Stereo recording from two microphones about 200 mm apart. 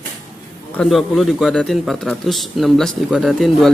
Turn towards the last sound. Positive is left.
turn(degrees=0)  # may be behind; listen again after turning